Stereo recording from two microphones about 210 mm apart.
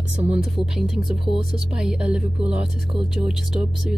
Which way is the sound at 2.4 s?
30° right (ahead or behind).